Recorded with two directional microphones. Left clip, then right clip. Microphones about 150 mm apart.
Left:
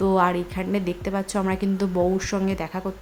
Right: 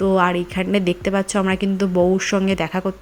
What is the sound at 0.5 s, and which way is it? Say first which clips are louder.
A woman's voice: right 7 dB; 25° right (ahead or behind).